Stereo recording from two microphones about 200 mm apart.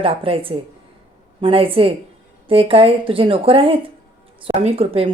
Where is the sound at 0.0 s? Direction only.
30° right (ahead or behind).